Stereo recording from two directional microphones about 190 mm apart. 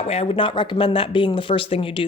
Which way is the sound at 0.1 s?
30° left (ahead or behind).